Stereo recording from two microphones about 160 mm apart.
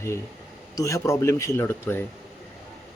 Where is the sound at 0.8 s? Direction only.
20° left (ahead or behind).